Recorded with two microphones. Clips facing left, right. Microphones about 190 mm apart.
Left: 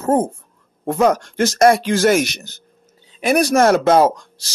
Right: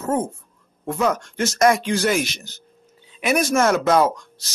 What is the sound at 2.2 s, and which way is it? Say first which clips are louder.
Speech: left 5 dB; 65° left (ahead or behind).